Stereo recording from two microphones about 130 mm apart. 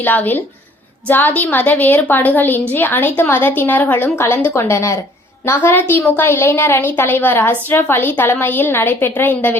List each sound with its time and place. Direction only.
0.0 s a woman's voice: 15° left (ahead or behind)